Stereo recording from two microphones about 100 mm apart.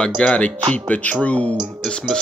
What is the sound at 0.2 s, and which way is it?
Speech, 10° left (ahead or behind).